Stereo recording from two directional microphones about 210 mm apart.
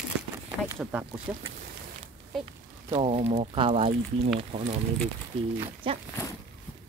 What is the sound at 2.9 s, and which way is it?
Speech, 25° right (ahead or behind).